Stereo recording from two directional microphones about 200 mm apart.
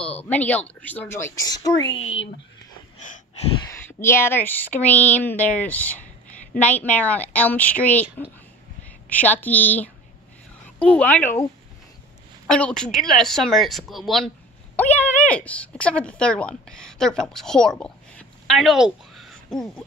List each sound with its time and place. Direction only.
0.0 s a sound: 5° left (ahead or behind)
0.7 s a woman's voice: 10° left (ahead or behind)
1.9 s speech: 75° left (ahead or behind)
3.6 s a woman's voice: 10° left (ahead or behind)
12.4 s speech: 5° left (ahead or behind)